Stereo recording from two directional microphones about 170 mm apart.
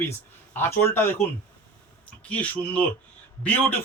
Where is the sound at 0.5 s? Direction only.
15° left (ahead or behind).